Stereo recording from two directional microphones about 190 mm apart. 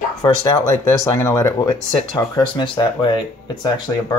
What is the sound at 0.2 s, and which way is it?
Speech, 20° left (ahead or behind).